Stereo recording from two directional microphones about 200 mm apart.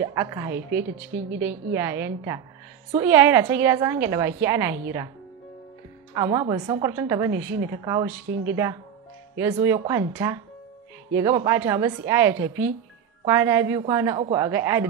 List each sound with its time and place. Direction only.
0.0 s a woman's voice: 15° right (ahead or behind)
6.1 s a woman's voice: 15° right (ahead or behind)